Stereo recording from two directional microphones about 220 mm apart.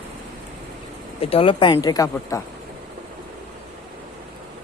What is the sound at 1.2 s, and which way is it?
Speech, 25° left (ahead or behind).